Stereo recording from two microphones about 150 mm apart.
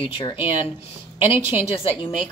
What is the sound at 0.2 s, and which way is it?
Speech, 30° left (ahead or behind).